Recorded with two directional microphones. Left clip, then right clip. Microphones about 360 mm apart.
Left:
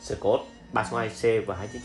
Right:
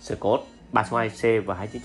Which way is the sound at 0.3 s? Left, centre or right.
Centre.